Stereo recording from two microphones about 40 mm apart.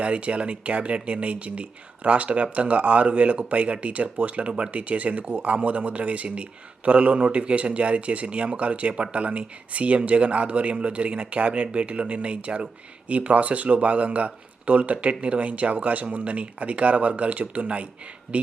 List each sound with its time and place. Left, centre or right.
0.0 s speech: right